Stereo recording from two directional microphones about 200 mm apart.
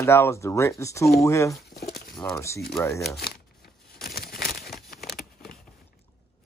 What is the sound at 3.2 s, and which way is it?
Crumpling, 50° left (ahead or behind).